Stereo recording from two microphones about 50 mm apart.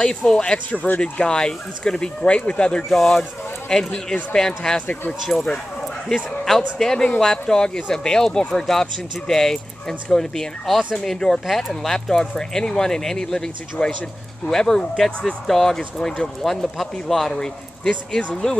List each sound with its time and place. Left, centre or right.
0.4 s speech: left
1.2 s speech: centre
2.9 s speech: centre
5.4 s dog: centre
6.8 s speech: centre